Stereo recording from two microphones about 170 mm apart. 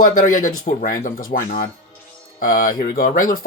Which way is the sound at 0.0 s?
50° left (ahead or behind).